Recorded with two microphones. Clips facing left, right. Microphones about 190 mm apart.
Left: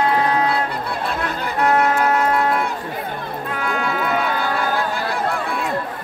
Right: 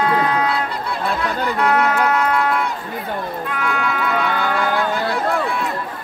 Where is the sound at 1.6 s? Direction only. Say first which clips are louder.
Left 1 dB; 30° left (ahead or behind).